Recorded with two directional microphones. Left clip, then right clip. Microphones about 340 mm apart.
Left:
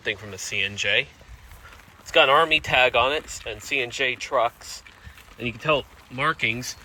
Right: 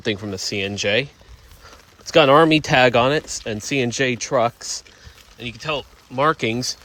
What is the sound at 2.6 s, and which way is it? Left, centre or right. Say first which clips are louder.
Speech: right 4 dB; right.